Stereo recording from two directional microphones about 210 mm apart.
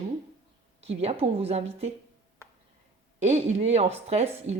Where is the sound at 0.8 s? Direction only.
30° right (ahead or behind).